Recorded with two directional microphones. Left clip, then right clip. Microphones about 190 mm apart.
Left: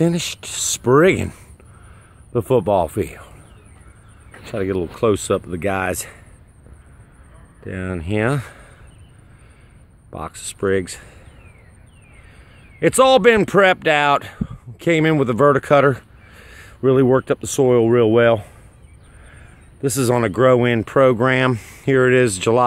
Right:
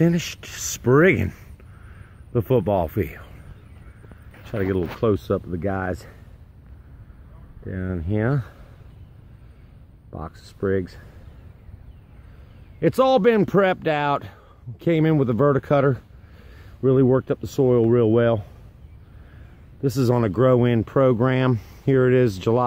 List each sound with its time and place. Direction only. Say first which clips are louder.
0.0 s speech: left 3 dB; 5° left (ahead or behind)
4.5 s speech: left 2 dB; 10° left (ahead or behind)
5.5 s speech: left 5 dB; 20° left (ahead or behind)
7.6 s speech: left 4 dB; 20° left (ahead or behind)
10.2 s speech: left 5 dB; 15° left (ahead or behind)
12.8 s speech: left 5 dB; 5° left (ahead or behind)
19.8 s speech: left 4 dB; 5° left (ahead or behind)